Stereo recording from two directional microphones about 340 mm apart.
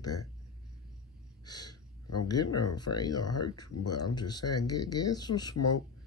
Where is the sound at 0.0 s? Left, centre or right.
Left.